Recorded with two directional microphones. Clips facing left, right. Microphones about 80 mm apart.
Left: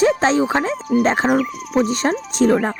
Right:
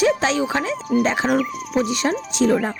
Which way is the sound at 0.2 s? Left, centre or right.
Left.